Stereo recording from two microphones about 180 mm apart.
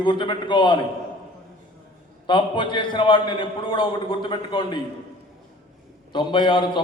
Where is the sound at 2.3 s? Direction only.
25° left (ahead or behind).